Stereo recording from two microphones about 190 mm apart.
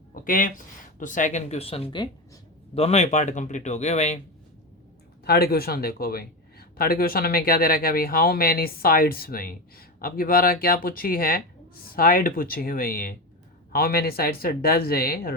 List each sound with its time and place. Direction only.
0.1 s speech: 45° left (ahead or behind)
5.2 s speech: 55° left (ahead or behind)